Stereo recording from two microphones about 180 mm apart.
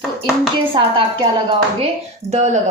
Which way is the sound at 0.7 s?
25° right (ahead or behind).